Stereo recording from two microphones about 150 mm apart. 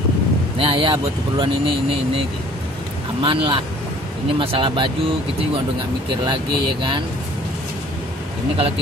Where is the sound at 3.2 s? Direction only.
35° right (ahead or behind).